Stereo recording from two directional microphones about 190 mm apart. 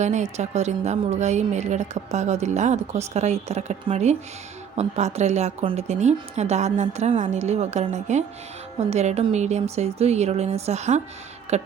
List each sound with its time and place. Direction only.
0.0 s a woman's voice: 40° right (ahead or behind)